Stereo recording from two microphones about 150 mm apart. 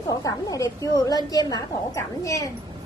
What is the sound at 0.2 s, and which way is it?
A woman's voice, 25° left (ahead or behind).